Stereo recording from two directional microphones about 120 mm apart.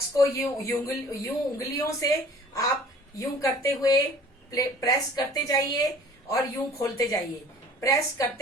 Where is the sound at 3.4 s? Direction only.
30° left (ahead or behind).